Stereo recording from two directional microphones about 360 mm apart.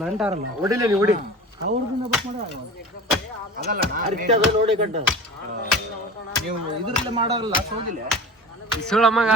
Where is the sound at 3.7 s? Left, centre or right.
Right.